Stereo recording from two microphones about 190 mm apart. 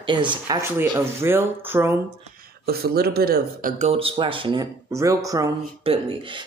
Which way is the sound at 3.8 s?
30° right (ahead or behind).